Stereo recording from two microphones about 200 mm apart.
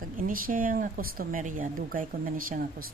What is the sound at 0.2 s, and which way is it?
Speech, 45° right (ahead or behind).